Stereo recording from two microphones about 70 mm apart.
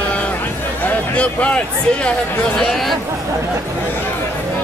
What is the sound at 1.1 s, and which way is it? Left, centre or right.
Speech, centre.